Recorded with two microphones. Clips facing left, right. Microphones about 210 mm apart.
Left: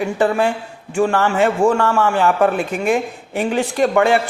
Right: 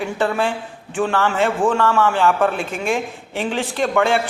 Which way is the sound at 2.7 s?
Centre (ahead or behind).